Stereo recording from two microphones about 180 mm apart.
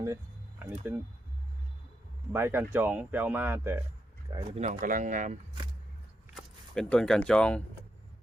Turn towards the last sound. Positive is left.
turn(degrees=5)  # may be behind; listen again after turning